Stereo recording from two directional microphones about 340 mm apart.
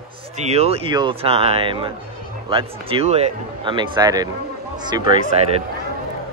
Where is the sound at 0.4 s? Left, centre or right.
Centre.